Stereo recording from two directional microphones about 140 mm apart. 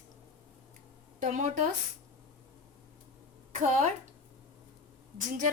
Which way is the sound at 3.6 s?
60° right (ahead or behind).